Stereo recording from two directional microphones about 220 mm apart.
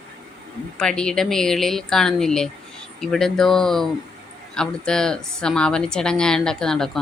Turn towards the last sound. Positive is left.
turn(degrees=0)  # may be behind; listen again after turning